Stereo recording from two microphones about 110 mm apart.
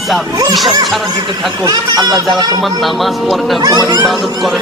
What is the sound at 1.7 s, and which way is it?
Speech, 35° right (ahead or behind).